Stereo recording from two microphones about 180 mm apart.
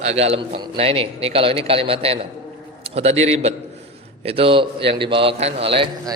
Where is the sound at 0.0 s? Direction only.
35° right (ahead or behind).